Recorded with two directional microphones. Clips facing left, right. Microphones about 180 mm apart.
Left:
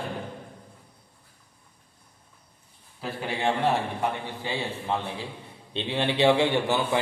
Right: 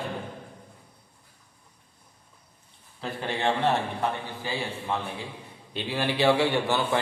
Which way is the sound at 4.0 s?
20° left (ahead or behind).